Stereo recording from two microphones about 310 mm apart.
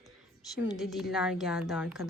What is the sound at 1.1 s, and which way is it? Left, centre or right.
Speech, centre.